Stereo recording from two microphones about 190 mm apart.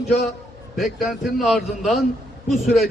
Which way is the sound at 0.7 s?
Centre (ahead or behind).